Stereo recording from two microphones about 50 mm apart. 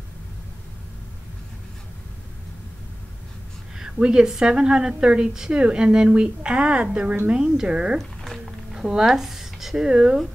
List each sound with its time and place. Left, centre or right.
3.8 s a woman's voice: centre
8.0 s a sound: centre
8.7 s a woman's voice: centre